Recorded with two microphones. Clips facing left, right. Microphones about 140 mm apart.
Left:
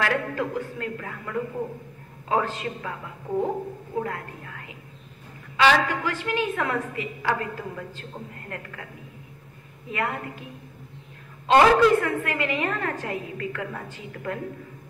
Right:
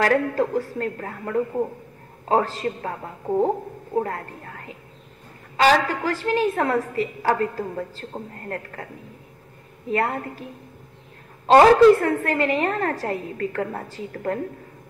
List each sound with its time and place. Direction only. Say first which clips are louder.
0.0 s a woman's voice: right 6 dB; 40° right (ahead or behind)
3.9 s a sound: right 5 dB; 40° right (ahead or behind)
5.6 s a woman's voice: right 2 dB; 40° right (ahead or behind)
9.8 s a woman's voice: right 5 dB; 35° right (ahead or behind)
11.4 s a woman's voice: right 5 dB; 40° right (ahead or behind)